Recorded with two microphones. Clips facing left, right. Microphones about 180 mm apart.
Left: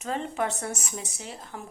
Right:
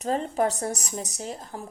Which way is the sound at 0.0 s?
35° right (ahead or behind).